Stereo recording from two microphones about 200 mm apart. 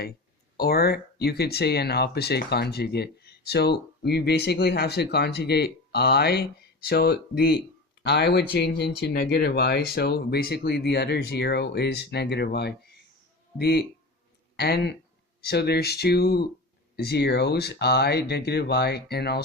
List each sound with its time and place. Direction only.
0.5 s speech: 50° left (ahead or behind)